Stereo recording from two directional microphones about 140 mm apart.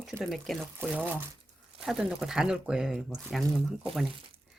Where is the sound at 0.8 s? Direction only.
10° right (ahead or behind).